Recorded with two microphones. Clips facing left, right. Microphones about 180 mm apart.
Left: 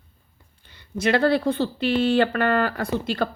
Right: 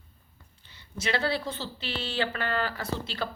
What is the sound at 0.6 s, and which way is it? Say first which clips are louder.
A woman's voice: left 10 dB; 55° left (ahead or behind).